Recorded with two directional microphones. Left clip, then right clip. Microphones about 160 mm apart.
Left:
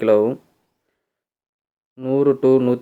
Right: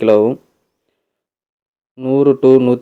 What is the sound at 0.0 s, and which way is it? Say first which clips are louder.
Speech: right 4 dB; 25° right (ahead or behind).